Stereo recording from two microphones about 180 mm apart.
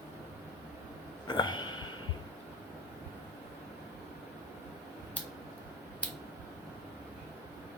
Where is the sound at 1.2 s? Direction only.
25° left (ahead or behind).